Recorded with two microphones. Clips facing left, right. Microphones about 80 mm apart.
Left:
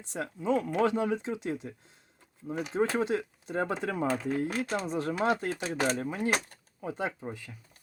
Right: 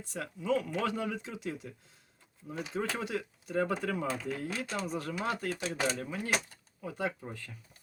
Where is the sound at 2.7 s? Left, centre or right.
Left; by 7.6 s centre.